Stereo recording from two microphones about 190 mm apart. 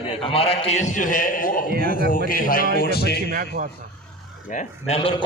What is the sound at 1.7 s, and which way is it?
Speech, 50° right (ahead or behind).